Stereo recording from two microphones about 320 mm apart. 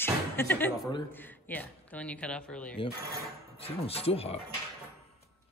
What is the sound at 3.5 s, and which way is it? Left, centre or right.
Speech, centre.